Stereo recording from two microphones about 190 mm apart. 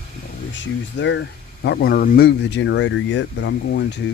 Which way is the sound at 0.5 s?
75° left (ahead or behind).